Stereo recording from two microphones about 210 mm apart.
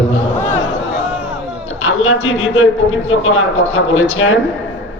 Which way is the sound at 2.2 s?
70° left (ahead or behind).